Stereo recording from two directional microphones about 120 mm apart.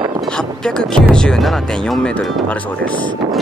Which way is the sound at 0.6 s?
5° left (ahead or behind).